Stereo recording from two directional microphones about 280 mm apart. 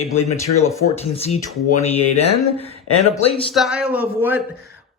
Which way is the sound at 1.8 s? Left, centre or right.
Left.